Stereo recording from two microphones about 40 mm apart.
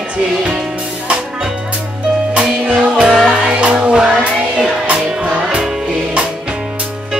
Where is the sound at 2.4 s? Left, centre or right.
Right.